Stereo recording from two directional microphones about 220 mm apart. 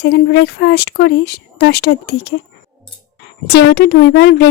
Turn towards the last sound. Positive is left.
turn(degrees=50)  # may be behind; listen again after turning